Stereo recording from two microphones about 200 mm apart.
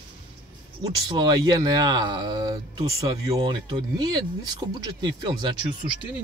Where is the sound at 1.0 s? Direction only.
20° right (ahead or behind).